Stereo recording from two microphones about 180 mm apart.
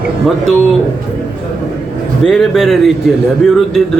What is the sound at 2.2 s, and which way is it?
Speech, centre (ahead or behind).